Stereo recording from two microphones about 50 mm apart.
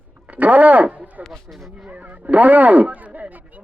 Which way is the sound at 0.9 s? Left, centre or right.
Right.